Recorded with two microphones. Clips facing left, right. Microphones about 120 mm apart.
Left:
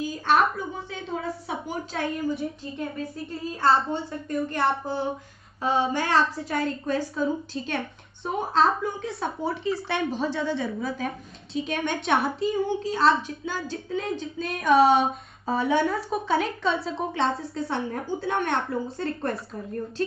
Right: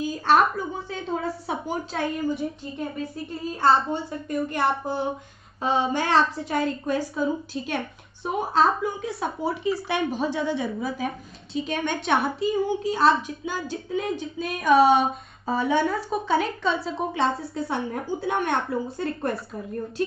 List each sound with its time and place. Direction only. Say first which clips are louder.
0.1 s a woman's voice: right 2 dB; 35° right (ahead or behind)
4.1 s speech: right 1 dB; centre (ahead or behind)
4.8 s a woman's voice: right 1 dB; 15° right (ahead or behind)
5.6 s child singing: right 1 dB; 25° right (ahead or behind)
6.9 s speech: right 1 dB; 5° right (ahead or behind)
10.3 s a woman's voice: right 1 dB; 15° right (ahead or behind)